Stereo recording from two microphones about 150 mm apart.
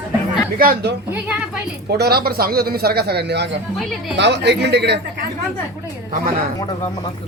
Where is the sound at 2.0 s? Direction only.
90° right.